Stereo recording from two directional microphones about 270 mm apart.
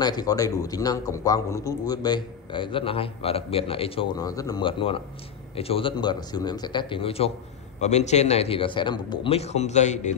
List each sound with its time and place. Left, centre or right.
0.0 s a man's voice: centre